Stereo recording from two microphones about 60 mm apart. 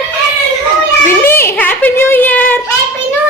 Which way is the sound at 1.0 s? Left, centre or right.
Left.